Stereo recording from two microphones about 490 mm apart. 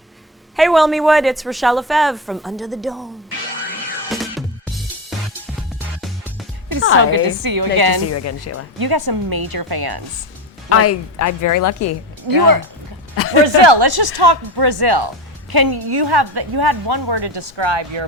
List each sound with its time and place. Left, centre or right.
0.5 s a woman's voice: centre
4.1 s music: centre
6.9 s a woman's voice: right
8.1 s speech: left
8.8 s a woman's voice: right
10.7 s a woman's voice: left
12.3 s speech: right
13.1 s a sound: left
13.4 s a woman's voice: right